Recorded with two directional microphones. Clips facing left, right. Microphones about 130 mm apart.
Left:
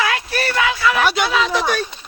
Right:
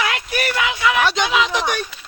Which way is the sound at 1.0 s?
10° left (ahead or behind).